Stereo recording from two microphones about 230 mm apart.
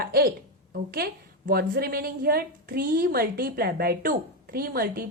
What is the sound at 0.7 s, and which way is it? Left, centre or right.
A woman's voice, right.